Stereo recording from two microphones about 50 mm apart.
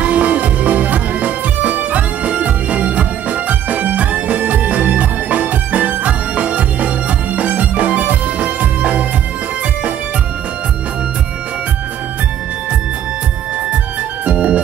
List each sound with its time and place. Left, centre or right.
0.0 s music: right
14.2 s organ: right